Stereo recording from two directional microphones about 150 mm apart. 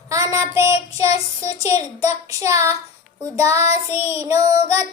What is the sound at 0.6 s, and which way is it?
Speech, 45° left (ahead or behind).